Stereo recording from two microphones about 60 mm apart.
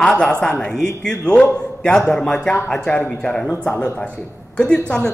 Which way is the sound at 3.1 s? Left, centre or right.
Left.